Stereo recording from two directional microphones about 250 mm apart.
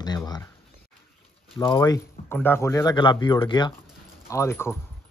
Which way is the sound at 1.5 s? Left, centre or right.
Centre.